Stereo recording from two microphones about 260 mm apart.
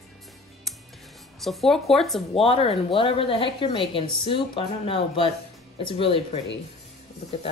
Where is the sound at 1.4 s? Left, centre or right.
Centre.